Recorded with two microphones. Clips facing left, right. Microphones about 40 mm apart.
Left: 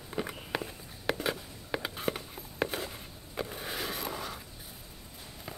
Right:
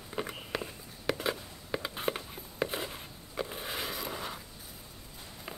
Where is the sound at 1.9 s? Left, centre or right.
Centre.